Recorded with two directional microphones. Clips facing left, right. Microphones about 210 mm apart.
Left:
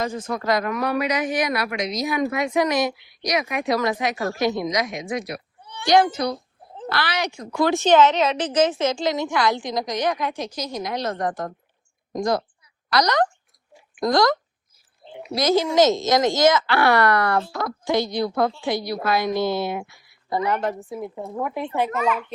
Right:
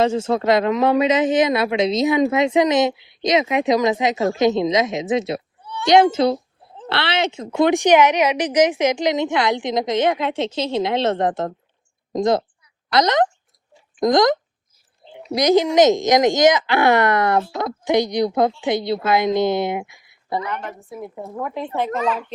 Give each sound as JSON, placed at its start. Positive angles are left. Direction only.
{"t": 0.0, "sound": "a woman's voice", "side_deg": -25}
{"t": 20.4, "sound": "a woman's voice", "side_deg": 40}
{"t": 21.8, "sound": "a child's voice", "side_deg": -30}